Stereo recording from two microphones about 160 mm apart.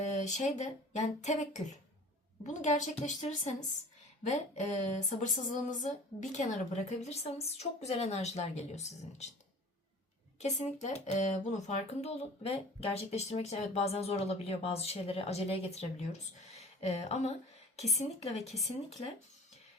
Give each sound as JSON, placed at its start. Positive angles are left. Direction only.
{"t": 0.1, "sound": "speech", "side_deg": 50}
{"t": 10.4, "sound": "speech", "side_deg": 45}